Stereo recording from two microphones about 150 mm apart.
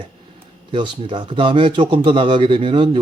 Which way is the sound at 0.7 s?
30° right (ahead or behind).